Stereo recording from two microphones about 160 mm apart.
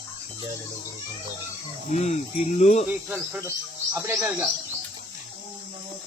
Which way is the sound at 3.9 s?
15° right (ahead or behind).